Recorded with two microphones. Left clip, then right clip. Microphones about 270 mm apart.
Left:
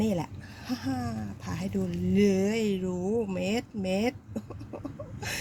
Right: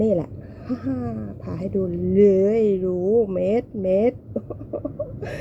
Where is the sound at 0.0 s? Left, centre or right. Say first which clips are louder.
Right 10 dB; left.